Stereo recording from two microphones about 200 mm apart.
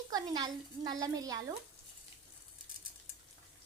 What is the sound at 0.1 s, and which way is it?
A woman's voice, 20° right (ahead or behind).